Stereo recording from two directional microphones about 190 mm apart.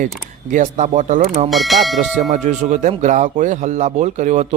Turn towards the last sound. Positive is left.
turn(degrees=-40)  # may be behind; listen again after turning